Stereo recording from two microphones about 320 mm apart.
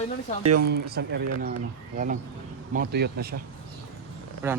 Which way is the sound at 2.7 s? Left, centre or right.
Right.